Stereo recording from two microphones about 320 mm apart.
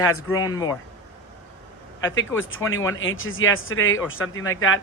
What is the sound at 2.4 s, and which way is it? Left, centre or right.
A man's voice, left.